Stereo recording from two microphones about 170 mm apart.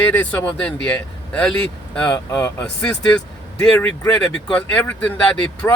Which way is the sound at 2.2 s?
20° left (ahead or behind).